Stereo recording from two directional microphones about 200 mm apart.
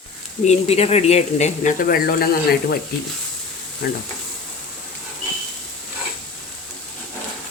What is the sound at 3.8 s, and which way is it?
Frying, 55° left (ahead or behind).